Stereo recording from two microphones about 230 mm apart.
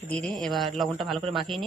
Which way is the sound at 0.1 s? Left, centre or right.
Centre.